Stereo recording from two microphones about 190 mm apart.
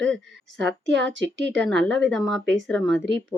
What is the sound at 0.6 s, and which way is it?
A woman's voice, 65° right (ahead or behind).